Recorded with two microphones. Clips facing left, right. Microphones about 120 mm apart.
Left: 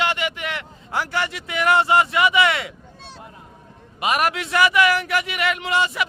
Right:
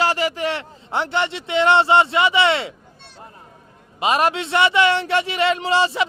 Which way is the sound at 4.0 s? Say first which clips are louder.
Right 3 dB; 25° right (ahead or behind).